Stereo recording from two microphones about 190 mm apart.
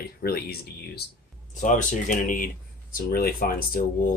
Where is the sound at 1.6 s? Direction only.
40° left (ahead or behind).